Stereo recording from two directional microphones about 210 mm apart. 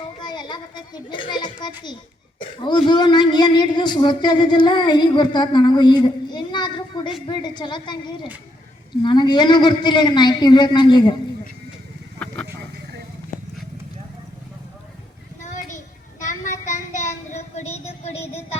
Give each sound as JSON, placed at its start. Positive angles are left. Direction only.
{"t": 0.2, "sound": "children playing", "side_deg": 20}
{"t": 1.6, "sound": "speech", "side_deg": 20}
{"t": 16.2, "sound": "child singing", "side_deg": 35}